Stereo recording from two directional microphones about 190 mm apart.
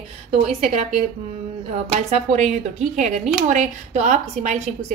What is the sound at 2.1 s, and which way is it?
A woman's voice, 35° right (ahead or behind).